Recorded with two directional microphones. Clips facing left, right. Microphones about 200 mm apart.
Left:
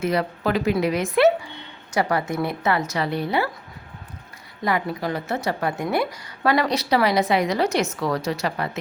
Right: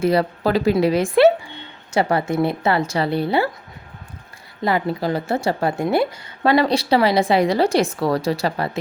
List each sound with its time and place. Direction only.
0.0 s a woman's voice: 35° right (ahead or behind)
4.6 s a woman's voice: 30° right (ahead or behind)